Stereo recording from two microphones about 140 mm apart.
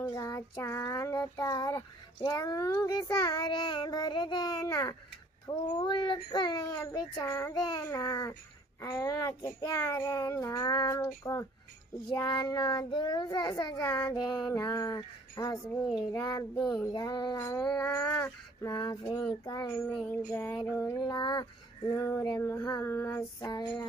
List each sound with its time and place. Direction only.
0.0 s child singing: 25° left (ahead or behind)
5.5 s speech: 30° left (ahead or behind)
6.8 s child singing: 20° left (ahead or behind)
13.8 s a sound: 10° left (ahead or behind)
14.1 s child singing: 25° left (ahead or behind)
17.6 s a sound: 5° left (ahead or behind)
18.0 s speech: 15° left (ahead or behind)
18.7 s child singing: 30° left (ahead or behind)
20.2 s a sound: 20° left (ahead or behind)
21.0 s child singing: 30° left (ahead or behind)
22.4 s a sound: 15° left (ahead or behind)
23.4 s child singing: 30° left (ahead or behind)